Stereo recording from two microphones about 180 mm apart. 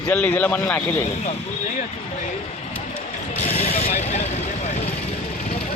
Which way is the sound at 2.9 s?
35° left (ahead or behind).